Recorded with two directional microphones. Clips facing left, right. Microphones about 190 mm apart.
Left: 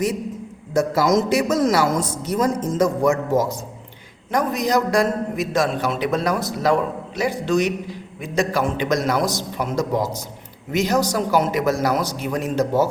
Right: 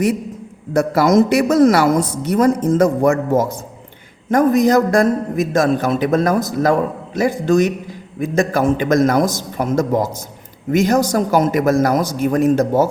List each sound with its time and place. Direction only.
0.7 s a man's voice: 60° right (ahead or behind)